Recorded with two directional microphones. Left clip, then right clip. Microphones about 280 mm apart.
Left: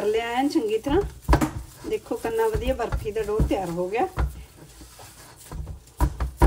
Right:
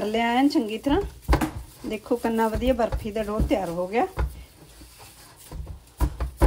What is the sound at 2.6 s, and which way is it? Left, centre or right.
A woman's voice, right.